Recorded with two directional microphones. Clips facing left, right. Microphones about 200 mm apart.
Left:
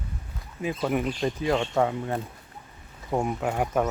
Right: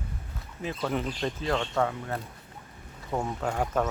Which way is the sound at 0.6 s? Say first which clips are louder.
Left 4 dB; 10° left (ahead or behind).